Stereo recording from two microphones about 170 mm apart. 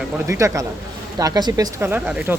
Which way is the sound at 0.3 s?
20° right (ahead or behind).